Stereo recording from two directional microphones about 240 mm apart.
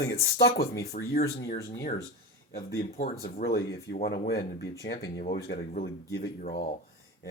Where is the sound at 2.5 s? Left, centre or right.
Left.